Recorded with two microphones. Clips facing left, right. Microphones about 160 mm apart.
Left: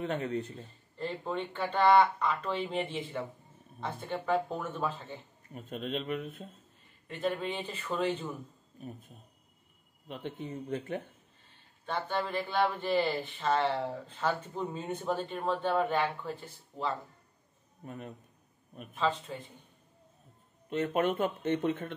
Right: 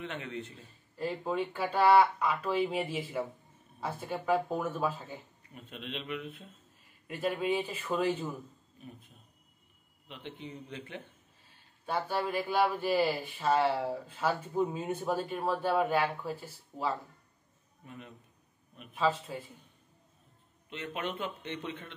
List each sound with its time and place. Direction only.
0.0 s a man's voice: 40° left (ahead or behind)
0.9 s speech: 5° right (ahead or behind)
5.5 s speech: 40° left (ahead or behind)
7.1 s speech: 10° right (ahead or behind)
8.8 s a man's voice: 45° left (ahead or behind)
10.0 s speech: 45° left (ahead or behind)
11.8 s speech: 10° right (ahead or behind)
17.8 s speech: 45° left (ahead or behind)
18.9 s speech: 5° right (ahead or behind)
20.7 s speech: 45° left (ahead or behind)